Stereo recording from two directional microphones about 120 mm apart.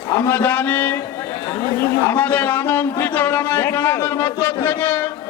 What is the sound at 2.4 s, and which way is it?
A man's voice, 15° left (ahead or behind).